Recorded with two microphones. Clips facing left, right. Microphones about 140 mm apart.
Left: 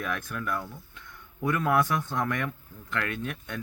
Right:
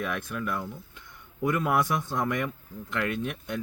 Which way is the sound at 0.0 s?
10° right (ahead or behind).